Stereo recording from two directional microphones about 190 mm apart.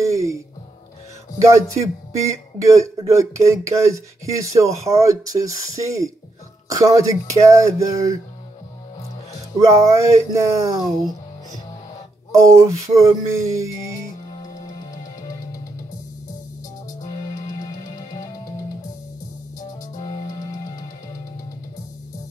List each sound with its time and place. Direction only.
0.0 s music: 15° right (ahead or behind)
1.4 s speech: 15° right (ahead or behind)
9.6 s speech: 15° right (ahead or behind)
12.3 s speech: 15° right (ahead or behind)
14.3 s music: 25° left (ahead or behind)
17.0 s music: 20° left (ahead or behind)
19.6 s music: 20° left (ahead or behind)